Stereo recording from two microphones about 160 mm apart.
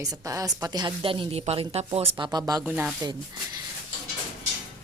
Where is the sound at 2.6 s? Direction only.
10° right (ahead or behind).